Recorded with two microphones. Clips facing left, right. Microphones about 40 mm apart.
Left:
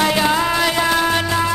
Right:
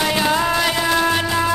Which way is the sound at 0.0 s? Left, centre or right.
Centre.